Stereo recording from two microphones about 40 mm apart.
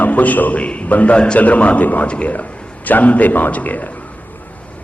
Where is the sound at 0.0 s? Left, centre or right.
Left.